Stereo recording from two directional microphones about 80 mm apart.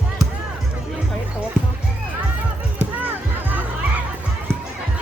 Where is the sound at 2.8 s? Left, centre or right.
Centre.